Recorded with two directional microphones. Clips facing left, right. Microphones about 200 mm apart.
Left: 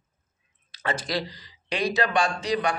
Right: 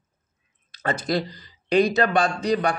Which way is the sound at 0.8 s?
50° right (ahead or behind).